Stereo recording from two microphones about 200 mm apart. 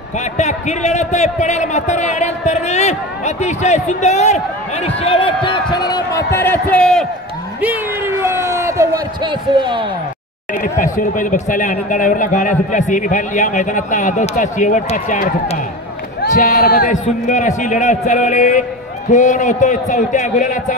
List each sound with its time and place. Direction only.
0.2 s a man's voice: 35° left (ahead or behind); by 7.1 s 5° left (ahead or behind)
7.6 s a man's voice: 10° right (ahead or behind)
10.5 s a man's voice: 45° left (ahead or behind)